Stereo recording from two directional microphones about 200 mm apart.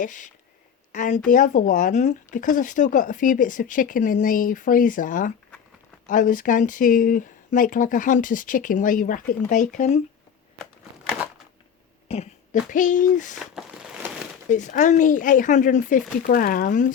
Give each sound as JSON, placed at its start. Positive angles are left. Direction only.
{"t": 0.0, "sound": "speech", "side_deg": 40}
{"t": 12.0, "sound": "throat clearing", "side_deg": 30}
{"t": 12.7, "sound": "speech", "side_deg": 40}
{"t": 13.3, "sound": "a sound", "side_deg": 0}
{"t": 14.5, "sound": "speech", "side_deg": 40}